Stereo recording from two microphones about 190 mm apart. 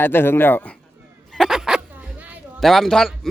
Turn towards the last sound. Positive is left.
turn(degrees=0)  # may be behind; listen again after turning